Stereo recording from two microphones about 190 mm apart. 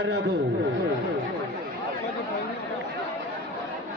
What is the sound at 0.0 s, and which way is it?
Speech, 65° right (ahead or behind).